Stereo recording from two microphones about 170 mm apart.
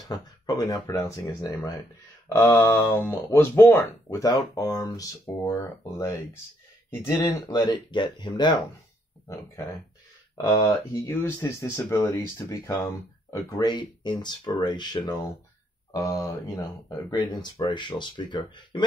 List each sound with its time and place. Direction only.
0.0 s speech: 20° left (ahead or behind)
10.3 s speech: 25° left (ahead or behind)